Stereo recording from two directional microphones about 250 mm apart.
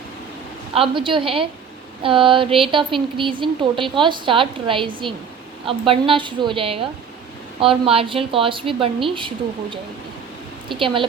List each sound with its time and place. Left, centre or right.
0.7 s speech: right